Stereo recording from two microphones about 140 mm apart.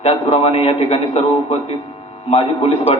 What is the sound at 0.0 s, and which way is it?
A man's voice, 45° left (ahead or behind).